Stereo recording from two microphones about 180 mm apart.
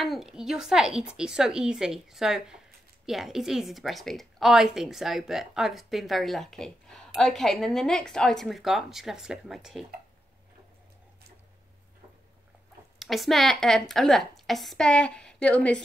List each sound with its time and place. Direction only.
0.0 s a woman's voice: centre (ahead or behind)
13.0 s a woman's voice: centre (ahead or behind)